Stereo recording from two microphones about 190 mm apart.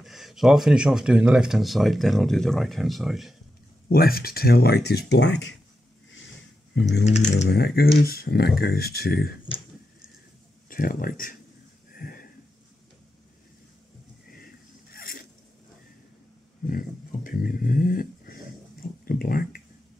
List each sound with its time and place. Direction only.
0.0 s speech: centre (ahead or behind)
3.9 s speech: 50° left (ahead or behind); by 5.6 s 65° left (ahead or behind)
6.7 s speech: 70° left (ahead or behind)
7.1 s speech: 35° left (ahead or behind)
7.4 s speech: 55° left (ahead or behind)
10.7 s speech: 45° left (ahead or behind)
11.9 s a sound: 50° left (ahead or behind)
14.3 s a sound: 50° left (ahead or behind)
16.6 s dog: 45° left (ahead or behind)